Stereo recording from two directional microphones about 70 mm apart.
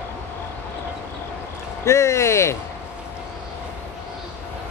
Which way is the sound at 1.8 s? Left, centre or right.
Left.